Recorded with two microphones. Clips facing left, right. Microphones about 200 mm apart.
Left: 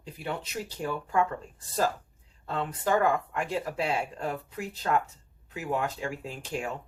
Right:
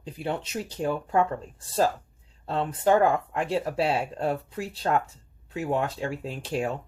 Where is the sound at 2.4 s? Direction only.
30° right (ahead or behind).